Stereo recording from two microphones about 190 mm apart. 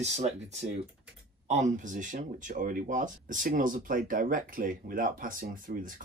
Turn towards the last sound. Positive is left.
turn(degrees=-45)  # may be behind; listen again after turning